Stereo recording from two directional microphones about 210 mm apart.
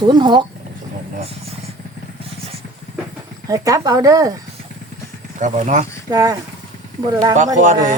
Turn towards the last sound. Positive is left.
turn(degrees=-35)  # may be behind; listen again after turning